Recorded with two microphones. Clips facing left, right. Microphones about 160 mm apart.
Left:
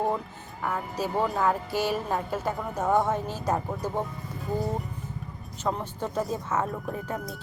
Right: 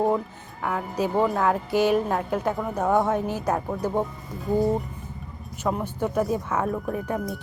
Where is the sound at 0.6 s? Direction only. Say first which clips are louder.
Right 4 dB; 5° right (ahead or behind).